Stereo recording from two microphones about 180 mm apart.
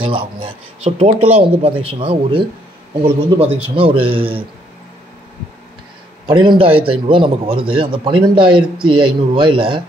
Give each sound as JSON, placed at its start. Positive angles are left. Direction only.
{"t": 0.0, "sound": "a man's voice", "side_deg": -30}
{"t": 6.2, "sound": "a man's voice", "side_deg": -25}